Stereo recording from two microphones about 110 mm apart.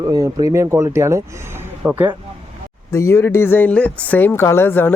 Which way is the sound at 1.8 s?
15° right (ahead or behind).